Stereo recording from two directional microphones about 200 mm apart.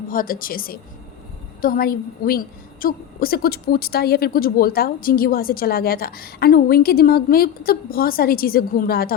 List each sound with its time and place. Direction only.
0.1 s speech: 45° left (ahead or behind)